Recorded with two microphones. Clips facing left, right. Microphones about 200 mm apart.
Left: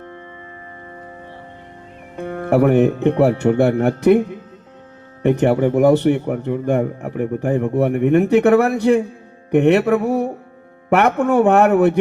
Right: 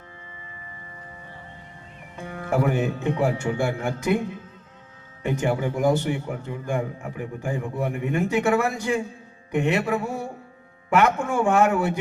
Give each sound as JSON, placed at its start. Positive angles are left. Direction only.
{"t": 2.1, "sound": "a man's voice", "side_deg": 60}
{"t": 5.2, "sound": "a man's voice", "side_deg": 65}